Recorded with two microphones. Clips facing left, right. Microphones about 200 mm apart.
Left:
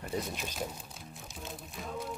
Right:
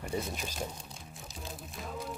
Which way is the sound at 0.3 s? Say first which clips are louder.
Even; centre (ahead or behind).